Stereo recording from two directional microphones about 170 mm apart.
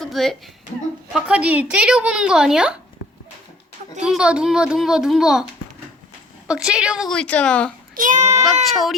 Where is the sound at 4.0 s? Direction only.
5° right (ahead or behind).